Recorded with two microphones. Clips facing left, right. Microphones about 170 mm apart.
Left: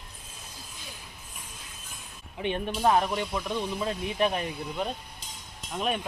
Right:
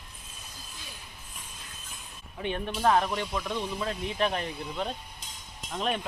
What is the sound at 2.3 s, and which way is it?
Speech, 20° left (ahead or behind).